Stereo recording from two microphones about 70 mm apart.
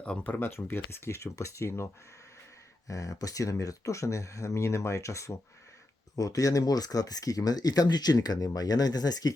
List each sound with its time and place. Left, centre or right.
0.0 s speech: centre
0.3 s speech: left
2.8 s speech: left
6.1 s speech: left